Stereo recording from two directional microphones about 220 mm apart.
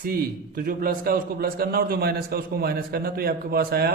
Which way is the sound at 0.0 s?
40° right (ahead or behind).